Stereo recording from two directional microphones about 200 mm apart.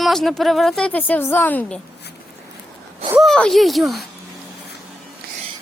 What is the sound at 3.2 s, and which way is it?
Speech, 5° left (ahead or behind).